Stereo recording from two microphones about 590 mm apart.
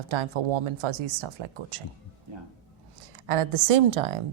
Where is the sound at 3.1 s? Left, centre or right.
Right.